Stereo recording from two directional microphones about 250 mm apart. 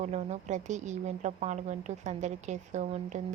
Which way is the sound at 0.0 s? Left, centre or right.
Right.